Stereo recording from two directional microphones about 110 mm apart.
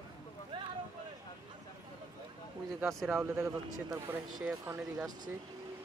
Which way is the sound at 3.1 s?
20° right (ahead or behind).